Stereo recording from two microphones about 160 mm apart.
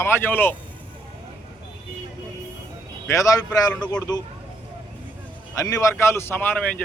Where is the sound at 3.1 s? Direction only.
20° left (ahead or behind).